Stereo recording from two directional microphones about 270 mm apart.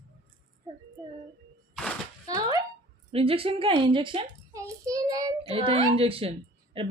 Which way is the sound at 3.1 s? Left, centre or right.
Right.